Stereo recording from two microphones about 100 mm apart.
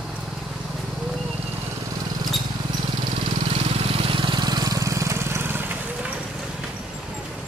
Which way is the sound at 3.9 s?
60° right (ahead or behind).